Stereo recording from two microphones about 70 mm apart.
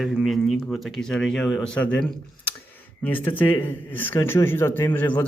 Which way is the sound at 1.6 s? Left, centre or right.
Centre.